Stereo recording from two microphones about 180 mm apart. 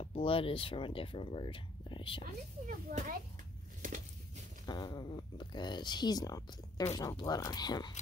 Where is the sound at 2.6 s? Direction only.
45° right (ahead or behind).